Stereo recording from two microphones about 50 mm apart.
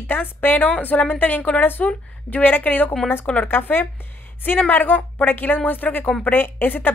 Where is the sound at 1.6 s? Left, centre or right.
Left.